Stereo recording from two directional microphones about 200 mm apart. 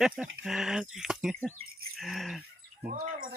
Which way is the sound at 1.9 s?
Centre (ahead or behind).